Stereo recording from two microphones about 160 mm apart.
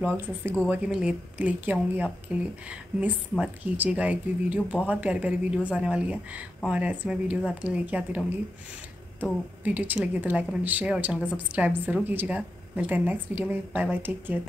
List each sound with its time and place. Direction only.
0.0 s speech: 10° right (ahead or behind)
9.6 s speech: 10° right (ahead or behind)